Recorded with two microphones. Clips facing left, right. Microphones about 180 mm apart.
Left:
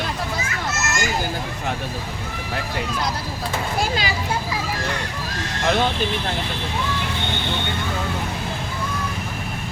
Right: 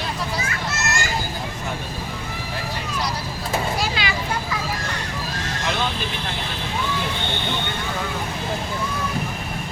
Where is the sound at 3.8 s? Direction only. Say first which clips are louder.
Left 2 dB; 40° left (ahead or behind).